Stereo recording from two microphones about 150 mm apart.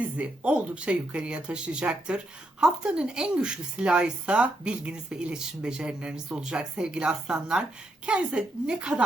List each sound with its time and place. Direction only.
0.0 s speech: 10° right (ahead or behind)